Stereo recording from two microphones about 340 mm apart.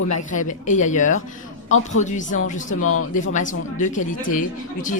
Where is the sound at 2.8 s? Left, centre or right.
Left.